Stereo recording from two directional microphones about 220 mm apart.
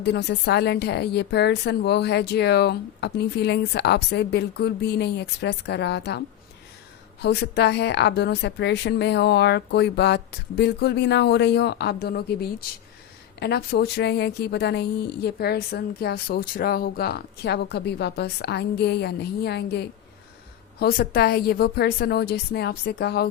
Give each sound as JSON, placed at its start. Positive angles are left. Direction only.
{"t": 0.0, "sound": "a woman's voice", "side_deg": 50}